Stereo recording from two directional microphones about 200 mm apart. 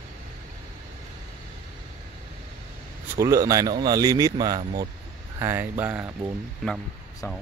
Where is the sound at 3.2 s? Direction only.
15° right (ahead or behind).